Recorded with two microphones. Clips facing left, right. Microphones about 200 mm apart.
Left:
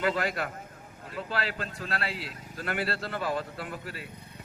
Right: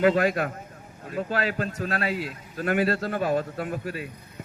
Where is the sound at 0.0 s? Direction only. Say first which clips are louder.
Right 8 dB; 45° right (ahead or behind).